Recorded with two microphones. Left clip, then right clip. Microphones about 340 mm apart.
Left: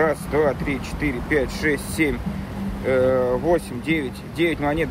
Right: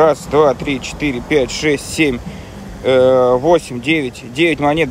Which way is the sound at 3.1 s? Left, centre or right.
Right.